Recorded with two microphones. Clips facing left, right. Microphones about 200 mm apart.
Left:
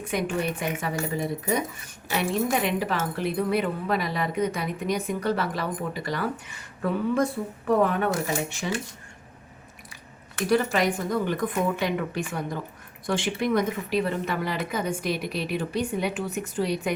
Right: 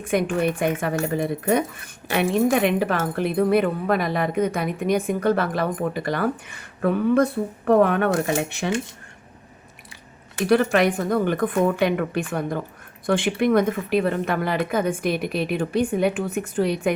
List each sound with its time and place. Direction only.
0.0 s speech: 55° right (ahead or behind)
10.5 s a woman's voice: 60° right (ahead or behind)